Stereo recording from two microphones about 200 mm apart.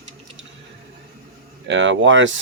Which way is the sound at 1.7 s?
65° right (ahead or behind).